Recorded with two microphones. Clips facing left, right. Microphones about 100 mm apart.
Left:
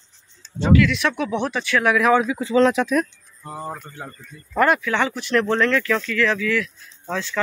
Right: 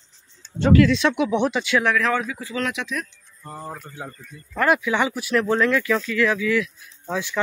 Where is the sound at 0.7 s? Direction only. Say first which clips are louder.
Right 2 dB; 35° right (ahead or behind).